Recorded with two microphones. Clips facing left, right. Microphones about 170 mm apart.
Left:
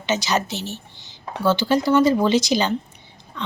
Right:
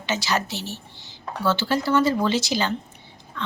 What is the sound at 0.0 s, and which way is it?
A woman's voice, 20° left (ahead or behind).